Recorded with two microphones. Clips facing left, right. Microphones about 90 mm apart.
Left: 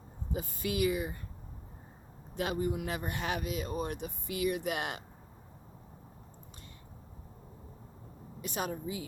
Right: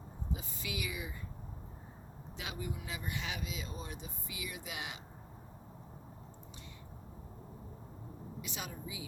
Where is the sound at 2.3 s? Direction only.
50° left (ahead or behind).